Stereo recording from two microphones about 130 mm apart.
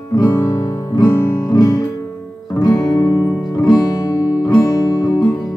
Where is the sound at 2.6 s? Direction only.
30° left (ahead or behind).